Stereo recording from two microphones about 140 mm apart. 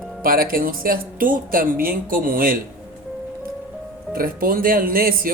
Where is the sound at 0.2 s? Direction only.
90° right.